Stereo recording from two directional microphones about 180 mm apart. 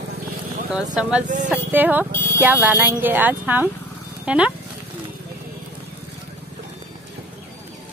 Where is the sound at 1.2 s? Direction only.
45° right (ahead or behind).